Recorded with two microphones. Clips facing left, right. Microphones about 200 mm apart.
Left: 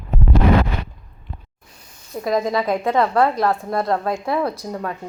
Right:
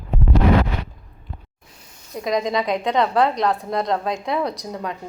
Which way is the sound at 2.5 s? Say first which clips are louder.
Left 1 dB; 20° right (ahead or behind).